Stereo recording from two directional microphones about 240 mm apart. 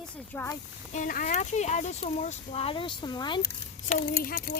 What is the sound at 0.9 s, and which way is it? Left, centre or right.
Speech, left.